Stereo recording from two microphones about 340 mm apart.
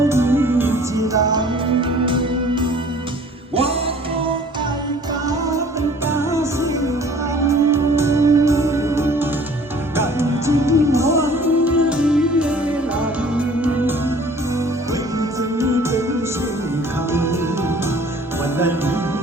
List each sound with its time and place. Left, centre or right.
0.1 s music: centre
6.1 s music: centre
15.2 s music: centre
17.1 s music: centre